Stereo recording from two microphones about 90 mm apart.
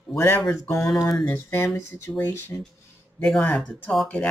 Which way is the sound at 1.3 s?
30° left (ahead or behind).